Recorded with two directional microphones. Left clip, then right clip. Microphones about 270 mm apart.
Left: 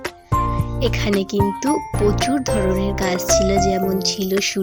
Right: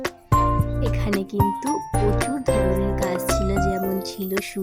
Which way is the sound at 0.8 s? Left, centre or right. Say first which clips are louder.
Left 6 dB; centre.